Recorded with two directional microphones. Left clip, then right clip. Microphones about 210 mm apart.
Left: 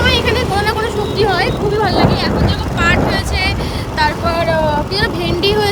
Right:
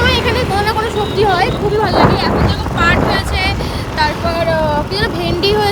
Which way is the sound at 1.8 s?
50° left (ahead or behind).